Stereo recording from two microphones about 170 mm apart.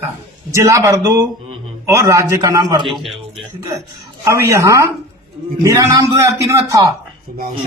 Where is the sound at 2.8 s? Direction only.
Centre (ahead or behind).